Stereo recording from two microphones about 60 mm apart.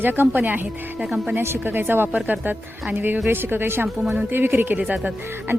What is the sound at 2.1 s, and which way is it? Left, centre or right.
Speech, centre.